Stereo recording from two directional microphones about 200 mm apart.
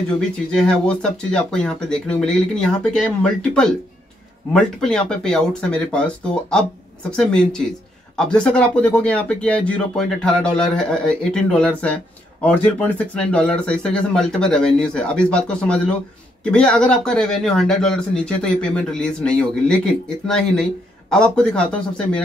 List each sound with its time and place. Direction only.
0.5 s speech: 5° left (ahead or behind)